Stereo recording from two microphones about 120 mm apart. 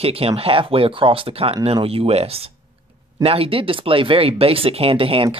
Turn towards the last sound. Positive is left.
turn(degrees=-50)  # may be behind; listen again after turning